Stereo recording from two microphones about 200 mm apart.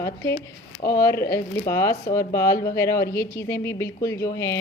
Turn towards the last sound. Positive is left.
turn(degrees=15)  # may be behind; listen again after turning